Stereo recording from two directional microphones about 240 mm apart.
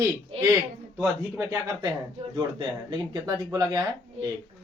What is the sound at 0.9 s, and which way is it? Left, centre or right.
Speech, centre.